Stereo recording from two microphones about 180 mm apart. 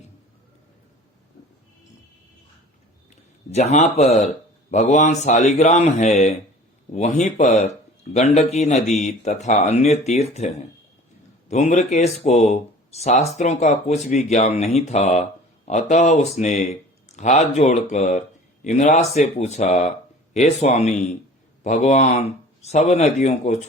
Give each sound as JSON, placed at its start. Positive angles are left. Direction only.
{"t": 3.5, "sound": "speech", "side_deg": 40}